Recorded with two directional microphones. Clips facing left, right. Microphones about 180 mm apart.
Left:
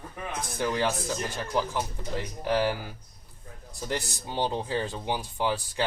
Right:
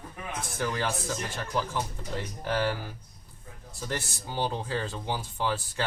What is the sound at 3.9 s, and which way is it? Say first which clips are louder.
Speech: left 3 dB; 20° left (ahead or behind).